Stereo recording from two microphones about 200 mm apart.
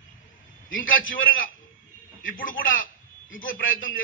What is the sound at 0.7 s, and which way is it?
Speech, 75° left (ahead or behind).